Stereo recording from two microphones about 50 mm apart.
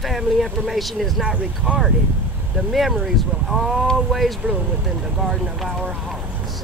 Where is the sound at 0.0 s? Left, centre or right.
Centre.